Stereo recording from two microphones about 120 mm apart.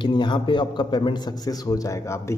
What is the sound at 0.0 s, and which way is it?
A man's voice, 40° left (ahead or behind).